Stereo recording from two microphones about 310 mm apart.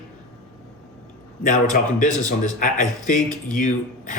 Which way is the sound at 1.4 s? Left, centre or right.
Left.